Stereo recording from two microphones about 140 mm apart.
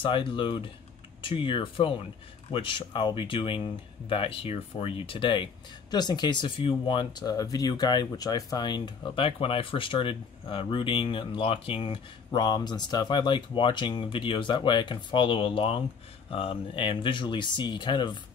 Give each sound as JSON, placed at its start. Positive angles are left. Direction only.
{"t": 0.0, "sound": "speech", "side_deg": 35}